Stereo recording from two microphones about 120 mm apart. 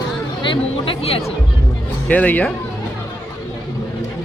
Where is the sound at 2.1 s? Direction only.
10° left (ahead or behind).